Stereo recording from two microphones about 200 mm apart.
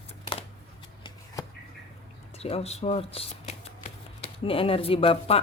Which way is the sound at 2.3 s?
30° left (ahead or behind).